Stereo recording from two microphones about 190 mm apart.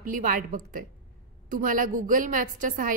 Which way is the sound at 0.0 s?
45° right (ahead or behind).